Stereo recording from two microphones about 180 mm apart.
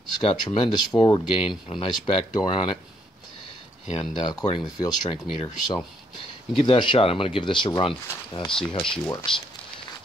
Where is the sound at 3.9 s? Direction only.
25° left (ahead or behind).